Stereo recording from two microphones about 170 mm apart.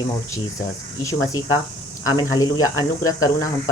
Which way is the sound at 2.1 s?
20° left (ahead or behind).